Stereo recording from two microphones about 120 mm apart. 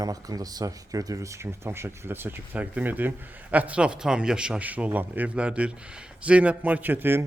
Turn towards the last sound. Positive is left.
turn(degrees=-15)  # may be behind; listen again after turning